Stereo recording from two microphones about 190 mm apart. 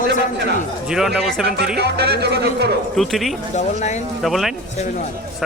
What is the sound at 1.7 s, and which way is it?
Speech, 60° right (ahead or behind).